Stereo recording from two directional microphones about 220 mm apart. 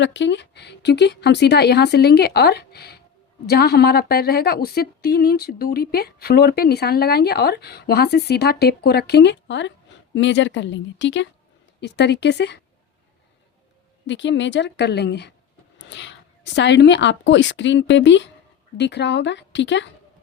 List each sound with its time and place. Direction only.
0.0 s a woman's voice: 55° left (ahead or behind)
14.1 s a woman's voice: 55° left (ahead or behind)